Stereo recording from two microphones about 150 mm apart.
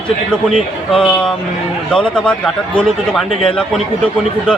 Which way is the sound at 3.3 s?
35° left (ahead or behind).